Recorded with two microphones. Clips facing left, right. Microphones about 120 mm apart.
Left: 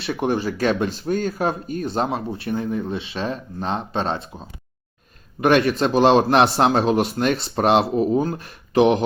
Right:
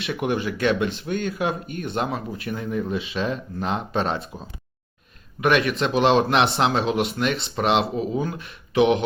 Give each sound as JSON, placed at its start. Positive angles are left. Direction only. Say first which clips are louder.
{"t": 0.0, "sound": "speech", "louder": "left 2 dB", "side_deg": 35}
{"t": 5.4, "sound": "speech", "louder": "left 3 dB", "side_deg": 40}